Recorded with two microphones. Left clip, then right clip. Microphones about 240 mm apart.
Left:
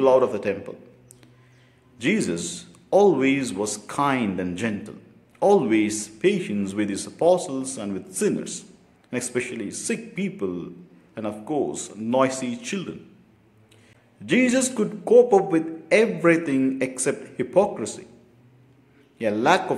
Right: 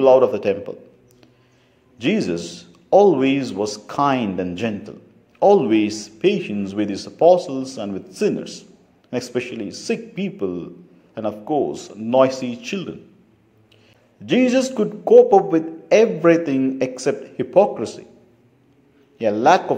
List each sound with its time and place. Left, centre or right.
0.0 s a man's voice: centre
2.0 s a man's voice: centre
14.2 s a man's voice: centre
19.1 s a man's voice: centre